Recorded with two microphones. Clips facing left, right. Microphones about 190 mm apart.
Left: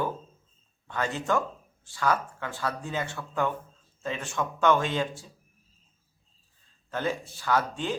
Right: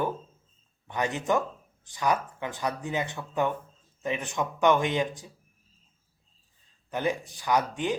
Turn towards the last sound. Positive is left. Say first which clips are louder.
# right 1 dB
turn(degrees=-15)  # may be behind; listen again after turning